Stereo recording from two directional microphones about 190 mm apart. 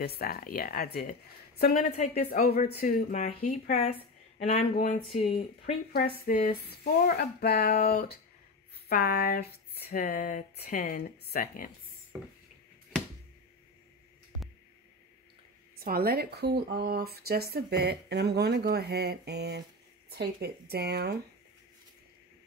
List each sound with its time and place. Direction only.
0.0 s speech: 55° left (ahead or behind)
1.7 s speech: 35° left (ahead or behind)
2.4 s speech: 50° left (ahead or behind); by 5.8 s 35° left (ahead or behind)
5.9 s speech: 55° left (ahead or behind)
15.8 s speech: 50° right (ahead or behind)